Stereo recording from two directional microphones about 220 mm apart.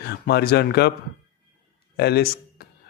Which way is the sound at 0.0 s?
45° left (ahead or behind).